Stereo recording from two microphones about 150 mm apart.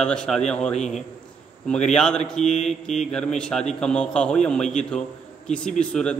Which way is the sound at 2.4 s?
50° left (ahead or behind).